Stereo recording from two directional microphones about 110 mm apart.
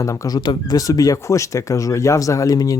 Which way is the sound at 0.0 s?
30° left (ahead or behind).